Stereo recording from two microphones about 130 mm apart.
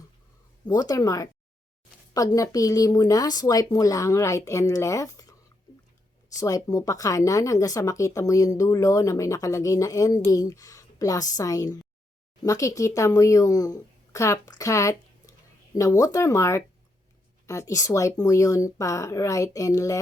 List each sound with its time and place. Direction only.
0.7 s speech: 30° left (ahead or behind)
6.4 s speech: 25° left (ahead or behind)